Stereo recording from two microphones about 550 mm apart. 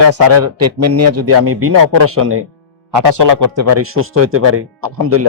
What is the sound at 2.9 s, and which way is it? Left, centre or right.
A man's voice, right.